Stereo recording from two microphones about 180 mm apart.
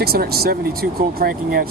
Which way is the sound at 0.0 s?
60° right (ahead or behind).